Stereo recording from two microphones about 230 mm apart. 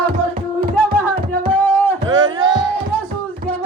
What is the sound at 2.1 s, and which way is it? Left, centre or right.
Music, centre.